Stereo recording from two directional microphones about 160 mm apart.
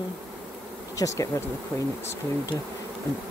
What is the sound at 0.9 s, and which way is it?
Speech, 20° left (ahead or behind).